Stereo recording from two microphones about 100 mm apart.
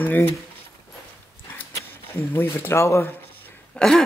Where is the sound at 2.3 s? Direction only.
25° left (ahead or behind).